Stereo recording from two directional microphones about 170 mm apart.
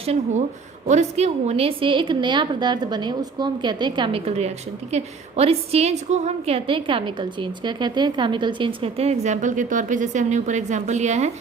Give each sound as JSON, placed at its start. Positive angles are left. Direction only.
{"t": 0.9, "sound": "a woman's voice", "side_deg": -40}